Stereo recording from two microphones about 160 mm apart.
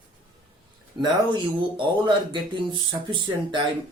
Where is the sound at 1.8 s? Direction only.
30° right (ahead or behind).